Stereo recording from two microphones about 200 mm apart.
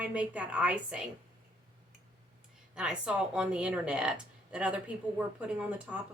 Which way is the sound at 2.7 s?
5° right (ahead or behind).